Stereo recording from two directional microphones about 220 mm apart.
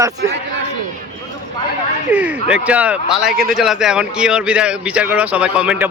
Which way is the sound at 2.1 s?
5° right (ahead or behind).